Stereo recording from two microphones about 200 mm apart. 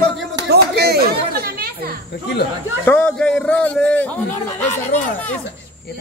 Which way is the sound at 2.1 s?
55° left (ahead or behind).